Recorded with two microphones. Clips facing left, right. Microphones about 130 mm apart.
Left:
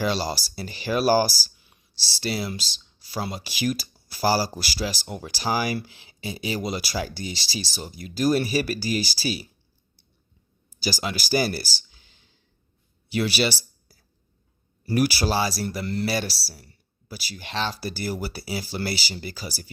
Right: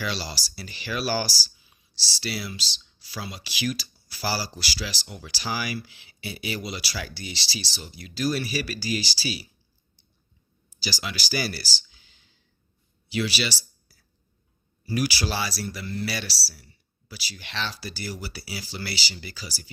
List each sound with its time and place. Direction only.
0.0 s speech: 45° left (ahead or behind)
6.1 s speech: 35° left (ahead or behind)
10.8 s speech: 45° left (ahead or behind)
13.1 s a sound: 50° left (ahead or behind)
14.8 s speech: 50° left (ahead or behind)